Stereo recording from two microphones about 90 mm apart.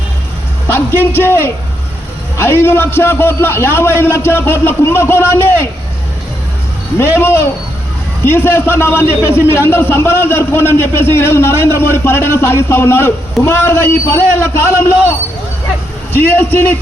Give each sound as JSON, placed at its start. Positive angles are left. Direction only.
{"t": 0.7, "sound": "a man's voice", "side_deg": 25}
{"t": 7.0, "sound": "a man's voice", "side_deg": 30}
{"t": 16.1, "sound": "a man's voice", "side_deg": 25}